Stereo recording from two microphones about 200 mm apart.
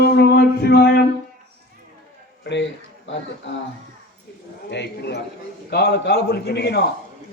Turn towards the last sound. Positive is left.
turn(degrees=55)  # may be behind; listen again after turning